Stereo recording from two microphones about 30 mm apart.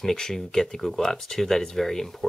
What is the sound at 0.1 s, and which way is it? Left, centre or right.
Speech, centre.